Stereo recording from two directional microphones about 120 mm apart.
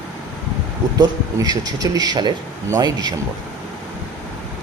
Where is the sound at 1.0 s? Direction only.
35° right (ahead or behind).